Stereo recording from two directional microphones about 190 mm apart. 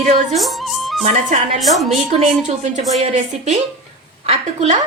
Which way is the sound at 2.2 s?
40° right (ahead or behind).